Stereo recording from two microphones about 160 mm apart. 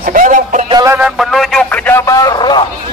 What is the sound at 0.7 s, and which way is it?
Music, 20° right (ahead or behind).